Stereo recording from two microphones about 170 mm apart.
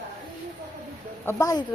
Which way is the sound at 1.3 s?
20° left (ahead or behind).